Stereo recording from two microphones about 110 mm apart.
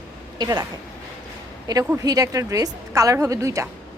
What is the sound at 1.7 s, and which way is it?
A woman's voice, 40° right (ahead or behind).